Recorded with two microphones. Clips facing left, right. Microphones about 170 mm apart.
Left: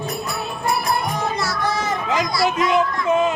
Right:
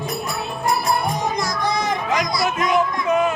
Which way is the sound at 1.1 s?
15° right (ahead or behind).